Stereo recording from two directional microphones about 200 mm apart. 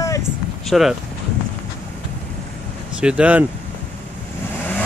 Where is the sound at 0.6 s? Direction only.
Centre (ahead or behind).